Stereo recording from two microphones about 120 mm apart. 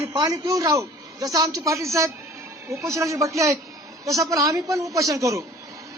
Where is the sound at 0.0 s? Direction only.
30° right (ahead or behind).